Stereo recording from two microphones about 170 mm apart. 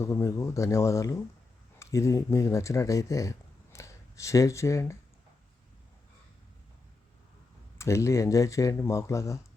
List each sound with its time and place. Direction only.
0.0 s speech: 15° left (ahead or behind)
7.8 s speech: 15° left (ahead or behind)